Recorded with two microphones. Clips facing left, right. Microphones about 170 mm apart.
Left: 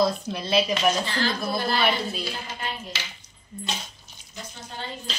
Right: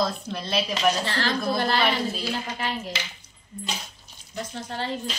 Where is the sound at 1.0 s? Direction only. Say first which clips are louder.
Right 1 dB; 70° right (ahead or behind).